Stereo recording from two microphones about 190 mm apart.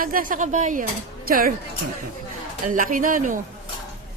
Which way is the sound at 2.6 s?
45° right (ahead or behind).